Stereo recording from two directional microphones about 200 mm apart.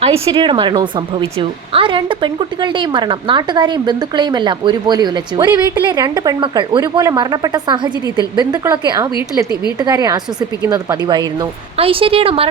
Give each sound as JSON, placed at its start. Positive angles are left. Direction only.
{"t": 0.0, "sound": "a woman's voice", "side_deg": -25}